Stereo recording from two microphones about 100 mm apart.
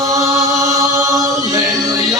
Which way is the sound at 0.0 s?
35° right (ahead or behind).